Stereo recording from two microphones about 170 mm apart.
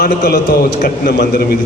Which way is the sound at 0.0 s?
60° left (ahead or behind).